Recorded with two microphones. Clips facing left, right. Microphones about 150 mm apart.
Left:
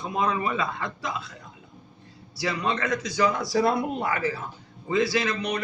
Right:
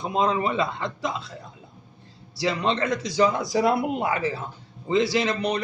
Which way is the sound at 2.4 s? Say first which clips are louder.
Right 3 dB; 25° right (ahead or behind).